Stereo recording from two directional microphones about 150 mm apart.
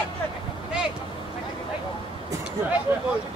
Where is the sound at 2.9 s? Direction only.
15° right (ahead or behind).